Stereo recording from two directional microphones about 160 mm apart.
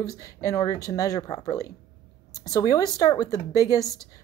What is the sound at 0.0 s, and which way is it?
Speech, 20° left (ahead or behind).